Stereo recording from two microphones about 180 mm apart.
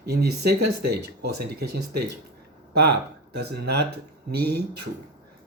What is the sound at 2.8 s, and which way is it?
Speech, 65° right (ahead or behind).